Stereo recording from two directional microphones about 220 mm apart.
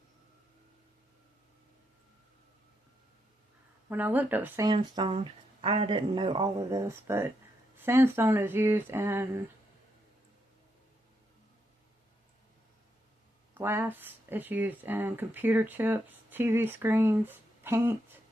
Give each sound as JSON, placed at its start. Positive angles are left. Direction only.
{"t": 3.8, "sound": "speech", "side_deg": -10}
{"t": 13.5, "sound": "speech", "side_deg": -10}